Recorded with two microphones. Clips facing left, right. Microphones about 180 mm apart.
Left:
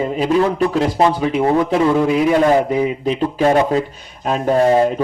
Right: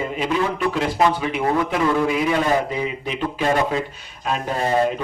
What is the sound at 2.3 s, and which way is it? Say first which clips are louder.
A man's voice: left 6 dB; 45° left (ahead or behind).